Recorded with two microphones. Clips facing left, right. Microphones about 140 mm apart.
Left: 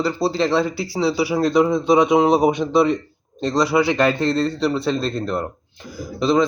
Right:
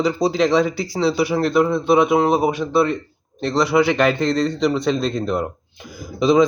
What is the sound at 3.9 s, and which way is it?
Speech, 15° right (ahead or behind).